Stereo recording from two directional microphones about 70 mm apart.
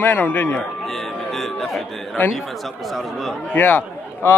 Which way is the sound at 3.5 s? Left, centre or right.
Left.